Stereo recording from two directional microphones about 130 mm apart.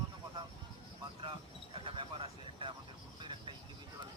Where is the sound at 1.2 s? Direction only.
45° right (ahead or behind).